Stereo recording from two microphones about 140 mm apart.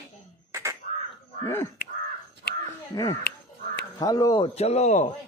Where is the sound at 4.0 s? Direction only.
25° left (ahead or behind).